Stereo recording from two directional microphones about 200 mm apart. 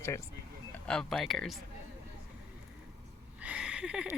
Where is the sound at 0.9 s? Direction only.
5° left (ahead or behind).